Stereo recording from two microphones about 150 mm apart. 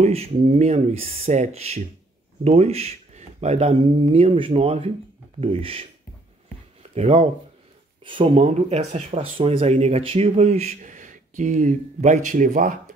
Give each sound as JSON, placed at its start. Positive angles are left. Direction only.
{"t": 0.0, "sound": "speech", "side_deg": -45}
{"t": 7.0, "sound": "speech", "side_deg": -40}